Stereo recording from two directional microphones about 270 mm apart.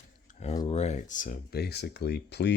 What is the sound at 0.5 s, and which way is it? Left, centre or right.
Speech, centre.